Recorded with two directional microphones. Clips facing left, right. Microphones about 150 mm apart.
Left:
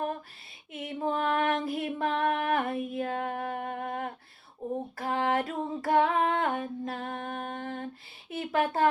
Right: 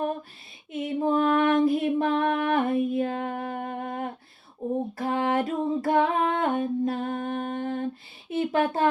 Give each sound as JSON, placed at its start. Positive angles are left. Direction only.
{"t": 0.7, "sound": "female singing", "side_deg": -25}
{"t": 1.6, "sound": "music", "side_deg": -25}
{"t": 4.9, "sound": "female singing", "side_deg": -25}
{"t": 8.3, "sound": "a sound", "side_deg": -25}